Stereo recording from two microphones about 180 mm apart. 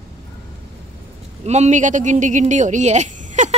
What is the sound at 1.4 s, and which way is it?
A woman's voice, 40° right (ahead or behind).